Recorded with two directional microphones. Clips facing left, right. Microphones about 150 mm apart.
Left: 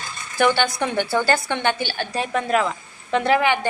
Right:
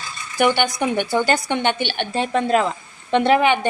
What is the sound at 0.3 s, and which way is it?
A woman's voice, 15° right (ahead or behind).